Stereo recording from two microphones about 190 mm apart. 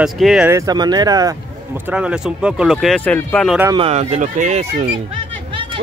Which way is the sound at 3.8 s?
35° right (ahead or behind).